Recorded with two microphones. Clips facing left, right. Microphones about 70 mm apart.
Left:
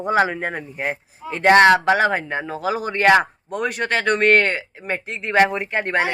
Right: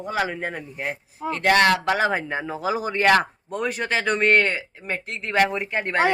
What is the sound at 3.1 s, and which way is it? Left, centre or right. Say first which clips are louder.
Speech: left 4 dB; centre.